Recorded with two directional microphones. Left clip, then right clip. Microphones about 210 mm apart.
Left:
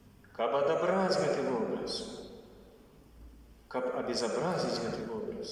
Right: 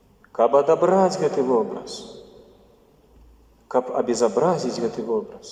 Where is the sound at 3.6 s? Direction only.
50° right (ahead or behind).